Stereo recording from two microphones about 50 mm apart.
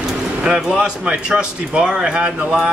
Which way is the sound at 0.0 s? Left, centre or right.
Centre.